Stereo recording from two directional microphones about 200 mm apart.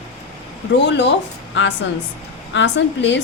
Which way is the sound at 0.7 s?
60° left (ahead or behind).